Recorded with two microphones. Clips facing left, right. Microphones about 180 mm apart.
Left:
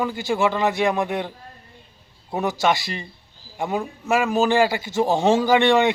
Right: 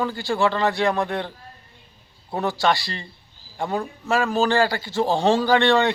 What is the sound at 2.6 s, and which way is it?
Speech, 20° left (ahead or behind).